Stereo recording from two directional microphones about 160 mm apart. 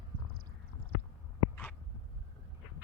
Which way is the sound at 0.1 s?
60° right (ahead or behind).